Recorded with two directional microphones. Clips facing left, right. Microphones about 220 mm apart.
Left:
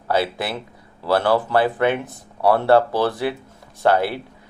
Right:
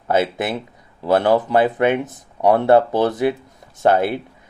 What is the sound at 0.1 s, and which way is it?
Speech, 20° right (ahead or behind).